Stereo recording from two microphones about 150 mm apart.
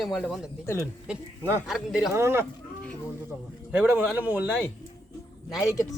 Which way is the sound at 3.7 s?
10° right (ahead or behind).